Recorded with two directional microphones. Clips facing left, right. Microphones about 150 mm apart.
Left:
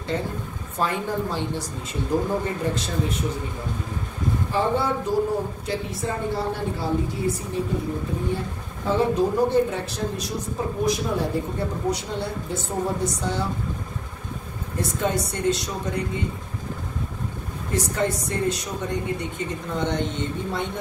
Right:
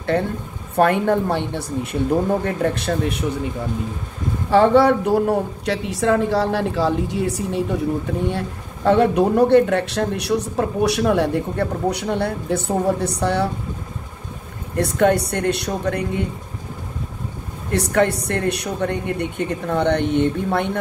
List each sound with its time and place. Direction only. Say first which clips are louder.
0.1 s a woman's voice: right 6 dB; 60° right (ahead or behind)
4.5 s a woman's voice: right 11 dB; 70° right (ahead or behind)
14.8 s a woman's voice: right 8 dB; 65° right (ahead or behind)
17.6 s a woman's voice: right 6 dB; 65° right (ahead or behind)